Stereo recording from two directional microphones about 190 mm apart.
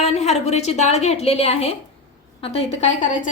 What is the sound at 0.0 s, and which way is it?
A woman's voice, 35° left (ahead or behind).